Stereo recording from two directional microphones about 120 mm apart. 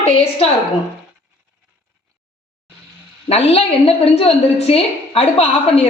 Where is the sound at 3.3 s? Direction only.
55° left (ahead or behind).